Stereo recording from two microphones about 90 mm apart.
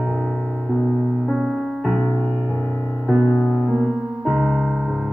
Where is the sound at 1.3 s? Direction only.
Centre (ahead or behind).